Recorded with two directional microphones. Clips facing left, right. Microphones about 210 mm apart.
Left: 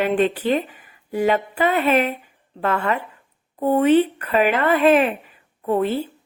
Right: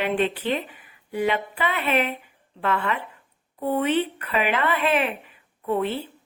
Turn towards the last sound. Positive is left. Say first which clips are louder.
# left 4 dB
turn(degrees=40)  # may be behind; listen again after turning